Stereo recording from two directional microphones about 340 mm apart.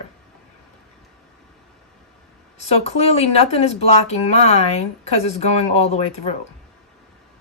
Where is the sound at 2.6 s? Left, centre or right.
Centre.